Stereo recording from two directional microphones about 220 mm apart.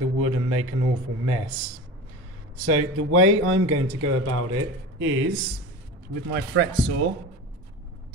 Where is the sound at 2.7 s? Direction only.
85° right; by 5.3 s 60° right (ahead or behind).